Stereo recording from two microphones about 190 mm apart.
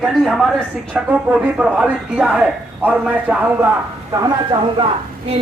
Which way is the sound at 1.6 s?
5° right (ahead or behind).